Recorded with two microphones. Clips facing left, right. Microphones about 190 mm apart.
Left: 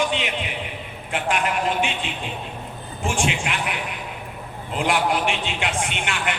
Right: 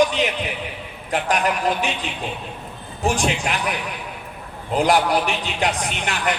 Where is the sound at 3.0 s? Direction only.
40° right (ahead or behind).